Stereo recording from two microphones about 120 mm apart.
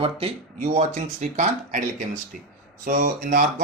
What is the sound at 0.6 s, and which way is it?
Speech, 70° right (ahead or behind).